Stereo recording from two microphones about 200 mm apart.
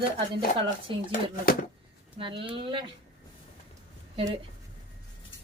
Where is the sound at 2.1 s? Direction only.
25° right (ahead or behind).